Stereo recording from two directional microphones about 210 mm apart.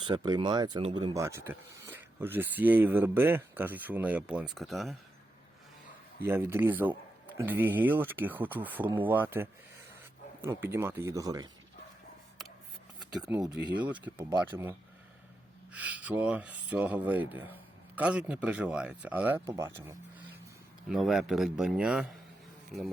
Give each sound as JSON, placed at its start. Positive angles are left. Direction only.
{"t": 0.0, "sound": "speech", "side_deg": -20}
{"t": 6.2, "sound": "speech", "side_deg": -10}
{"t": 10.6, "sound": "speech", "side_deg": -10}
{"t": 13.0, "sound": "a sound", "side_deg": 0}
{"t": 13.3, "sound": "speech", "side_deg": -20}
{"t": 13.8, "sound": "speech", "side_deg": -10}
{"t": 20.9, "sound": "a man's voice", "side_deg": 0}